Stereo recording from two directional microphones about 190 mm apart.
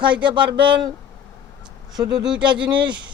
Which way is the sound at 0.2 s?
25° right (ahead or behind).